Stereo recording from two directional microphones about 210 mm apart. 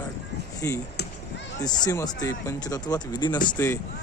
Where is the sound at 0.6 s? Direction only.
10° left (ahead or behind).